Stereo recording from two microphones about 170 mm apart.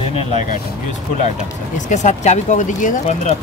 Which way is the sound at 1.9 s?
45° left (ahead or behind).